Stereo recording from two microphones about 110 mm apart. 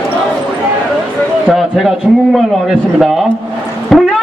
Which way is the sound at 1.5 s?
Centre (ahead or behind).